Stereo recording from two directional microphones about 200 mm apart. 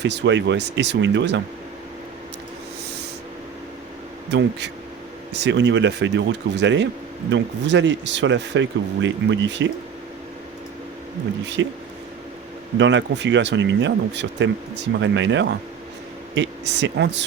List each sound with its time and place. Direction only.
0.0 s speech: 60° right (ahead or behind)
4.3 s speech: 60° right (ahead or behind)
11.6 s speech: 65° right (ahead or behind)